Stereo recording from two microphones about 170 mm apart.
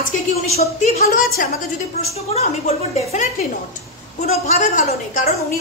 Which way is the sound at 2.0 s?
40° left (ahead or behind).